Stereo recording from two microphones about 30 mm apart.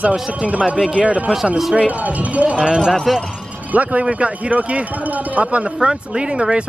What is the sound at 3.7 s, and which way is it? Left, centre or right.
Speech, right.